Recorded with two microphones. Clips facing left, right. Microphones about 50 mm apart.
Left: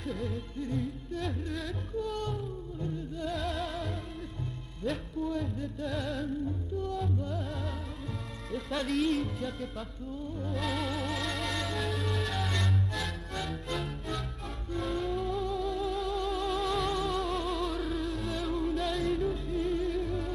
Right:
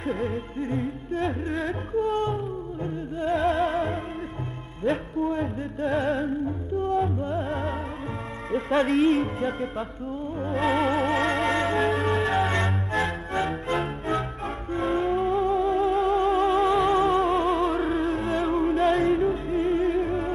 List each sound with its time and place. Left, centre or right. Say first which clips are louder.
0.0 s music: right 8 dB; right